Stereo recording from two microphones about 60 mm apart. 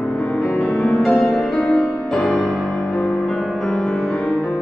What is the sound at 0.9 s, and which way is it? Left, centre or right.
Music, centre.